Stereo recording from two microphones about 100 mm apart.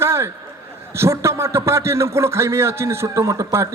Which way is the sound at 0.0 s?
25° right (ahead or behind).